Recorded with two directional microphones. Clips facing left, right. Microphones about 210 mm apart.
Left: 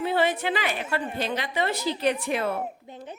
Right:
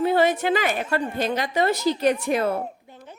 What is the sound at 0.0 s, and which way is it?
A woman's voice, 45° right (ahead or behind).